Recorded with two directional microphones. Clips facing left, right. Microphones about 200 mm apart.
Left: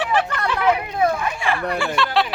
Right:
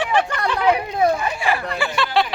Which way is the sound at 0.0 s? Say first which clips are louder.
Right 1 dB; 5° left (ahead or behind).